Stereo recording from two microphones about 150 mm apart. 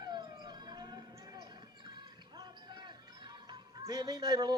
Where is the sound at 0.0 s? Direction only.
30° right (ahead or behind).